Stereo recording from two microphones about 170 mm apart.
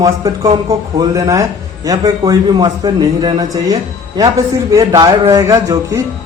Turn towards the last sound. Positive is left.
turn(degrees=-20)  # may be behind; listen again after turning